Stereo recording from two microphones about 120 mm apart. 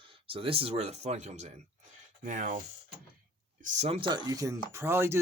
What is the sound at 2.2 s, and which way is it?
Speech, 90° right.